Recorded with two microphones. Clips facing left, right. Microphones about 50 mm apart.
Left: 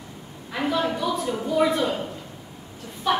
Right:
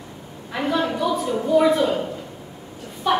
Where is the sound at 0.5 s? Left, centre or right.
Centre.